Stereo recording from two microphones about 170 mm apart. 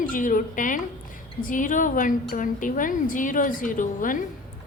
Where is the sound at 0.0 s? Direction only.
50° left (ahead or behind).